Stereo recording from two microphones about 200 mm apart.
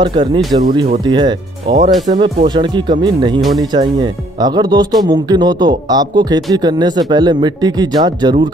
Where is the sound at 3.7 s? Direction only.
20° right (ahead or behind).